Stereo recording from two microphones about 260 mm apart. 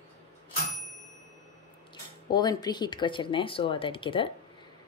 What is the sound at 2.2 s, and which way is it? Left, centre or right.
A woman's voice, centre.